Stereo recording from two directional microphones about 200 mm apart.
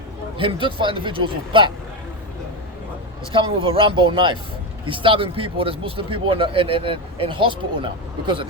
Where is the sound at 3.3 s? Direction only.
25° right (ahead or behind).